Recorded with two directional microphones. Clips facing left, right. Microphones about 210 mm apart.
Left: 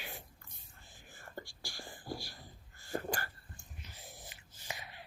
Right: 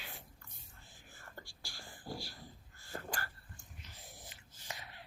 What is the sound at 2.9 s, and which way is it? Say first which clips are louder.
Sneeze: left 6 dB; 20° left (ahead or behind).